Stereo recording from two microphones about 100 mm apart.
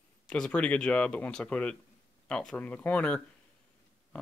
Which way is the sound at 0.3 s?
10° left (ahead or behind).